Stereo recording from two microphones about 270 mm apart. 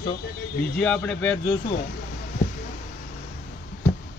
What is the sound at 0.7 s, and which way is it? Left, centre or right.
Speech, centre.